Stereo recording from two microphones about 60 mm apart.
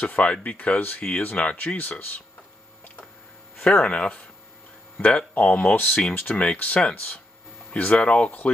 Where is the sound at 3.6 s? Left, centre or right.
Centre.